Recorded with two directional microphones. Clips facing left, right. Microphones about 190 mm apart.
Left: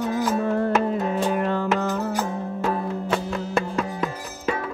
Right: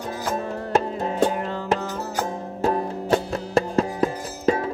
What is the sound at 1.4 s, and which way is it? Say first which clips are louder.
Music: left 5 dB; 60° left (ahead or behind).